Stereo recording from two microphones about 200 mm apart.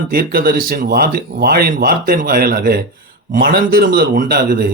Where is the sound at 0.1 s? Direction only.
45° right (ahead or behind).